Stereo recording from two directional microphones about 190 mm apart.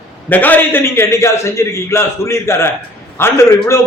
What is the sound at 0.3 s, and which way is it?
A man's voice, 10° left (ahead or behind).